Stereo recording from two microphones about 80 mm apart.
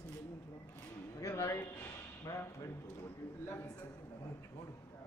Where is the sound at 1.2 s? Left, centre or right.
Left.